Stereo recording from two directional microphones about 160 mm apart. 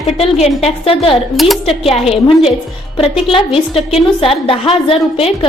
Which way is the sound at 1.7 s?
40° left (ahead or behind).